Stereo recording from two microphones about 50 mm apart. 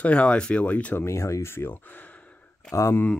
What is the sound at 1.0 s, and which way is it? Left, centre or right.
Speech, left.